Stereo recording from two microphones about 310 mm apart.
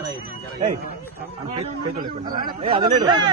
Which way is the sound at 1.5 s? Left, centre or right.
Right.